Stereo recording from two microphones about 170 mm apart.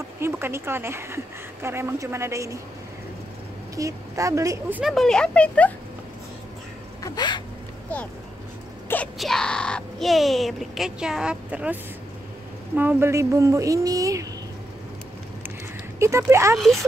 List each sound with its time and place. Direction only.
0.2 s a woman's voice: 15° right (ahead or behind)
3.7 s speech: 20° right (ahead or behind)
4.9 s speech: 5° left (ahead or behind)
7.0 s a sound: 25° left (ahead or behind)
8.8 s speech: 10° left (ahead or behind); by 14.2 s 20° right (ahead or behind)
16.0 s a woman's voice: 15° right (ahead or behind)
16.5 s speech: centre (ahead or behind)